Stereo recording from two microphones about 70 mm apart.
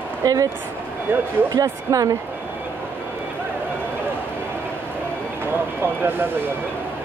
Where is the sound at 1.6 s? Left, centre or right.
Right.